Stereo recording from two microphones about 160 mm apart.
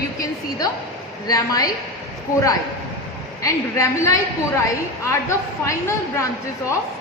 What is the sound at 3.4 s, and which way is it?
A woman's voice, 20° left (ahead or behind).